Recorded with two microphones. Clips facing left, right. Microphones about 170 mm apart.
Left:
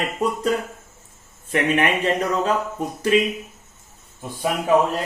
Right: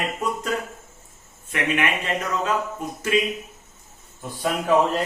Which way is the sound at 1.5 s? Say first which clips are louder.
Left 4 dB; 30° left (ahead or behind).